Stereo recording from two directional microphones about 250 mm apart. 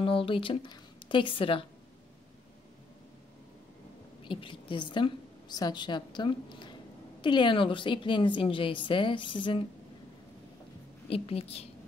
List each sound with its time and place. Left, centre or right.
0.0 s speech: left
4.2 s a woman's voice: centre
11.1 s a woman's voice: left